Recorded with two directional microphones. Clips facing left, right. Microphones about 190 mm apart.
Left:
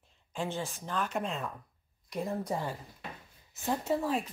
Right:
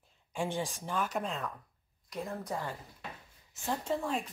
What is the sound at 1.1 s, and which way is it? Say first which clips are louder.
Speech: left 1 dB; centre (ahead or behind).